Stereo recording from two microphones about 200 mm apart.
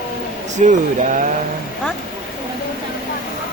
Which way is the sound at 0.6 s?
35° right (ahead or behind).